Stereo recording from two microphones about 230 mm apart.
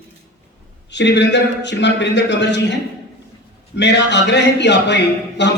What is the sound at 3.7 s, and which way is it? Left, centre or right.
Speech, left.